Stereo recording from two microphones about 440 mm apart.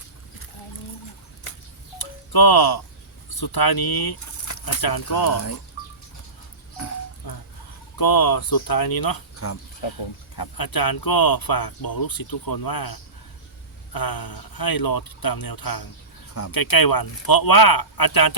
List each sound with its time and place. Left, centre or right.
2.0 s music: left
3.4 s speech: left
7.2 s a sound: left
7.9 s speech: left
10.3 s speech: left